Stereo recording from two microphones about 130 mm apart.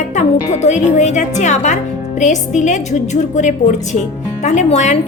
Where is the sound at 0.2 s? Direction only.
60° left (ahead or behind).